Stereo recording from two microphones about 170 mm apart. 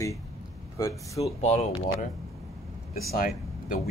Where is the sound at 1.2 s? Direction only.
40° left (ahead or behind).